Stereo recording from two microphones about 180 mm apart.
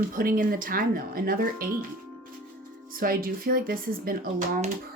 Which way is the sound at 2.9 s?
55° right (ahead or behind).